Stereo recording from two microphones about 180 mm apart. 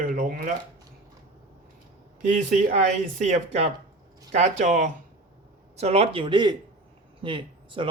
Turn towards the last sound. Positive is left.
turn(degrees=-30)  # may be behind; listen again after turning